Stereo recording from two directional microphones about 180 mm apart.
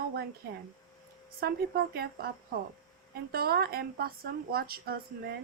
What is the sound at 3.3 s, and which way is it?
Speech, 60° right (ahead or behind).